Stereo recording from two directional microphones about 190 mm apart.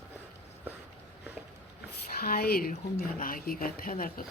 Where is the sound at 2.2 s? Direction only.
55° left (ahead or behind).